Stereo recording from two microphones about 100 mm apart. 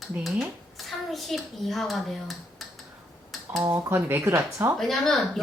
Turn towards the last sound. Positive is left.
turn(degrees=0)  # may be behind; listen again after turning